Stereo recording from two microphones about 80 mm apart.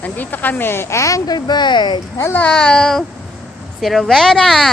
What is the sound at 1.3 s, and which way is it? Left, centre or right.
Speech, left.